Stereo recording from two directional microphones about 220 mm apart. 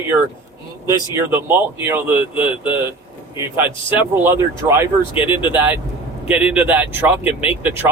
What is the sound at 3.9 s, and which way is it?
Speech, 10° right (ahead or behind).